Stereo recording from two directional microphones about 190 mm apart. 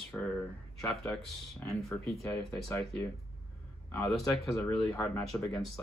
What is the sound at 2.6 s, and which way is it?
Speech, 15° left (ahead or behind).